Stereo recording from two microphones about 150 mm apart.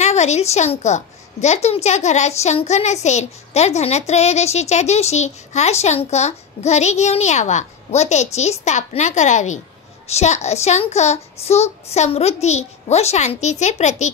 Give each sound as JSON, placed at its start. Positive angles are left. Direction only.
{"t": 0.0, "sound": "a child's voice", "side_deg": 50}